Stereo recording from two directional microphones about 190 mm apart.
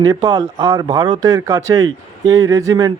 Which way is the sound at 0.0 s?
20° right (ahead or behind).